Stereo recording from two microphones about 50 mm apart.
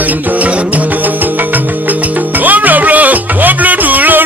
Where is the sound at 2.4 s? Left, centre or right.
Right.